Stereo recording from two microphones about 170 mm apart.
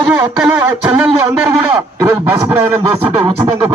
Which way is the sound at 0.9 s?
10° right (ahead or behind).